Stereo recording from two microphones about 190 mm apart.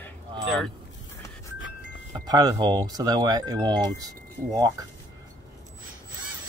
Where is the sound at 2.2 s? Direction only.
20° right (ahead or behind).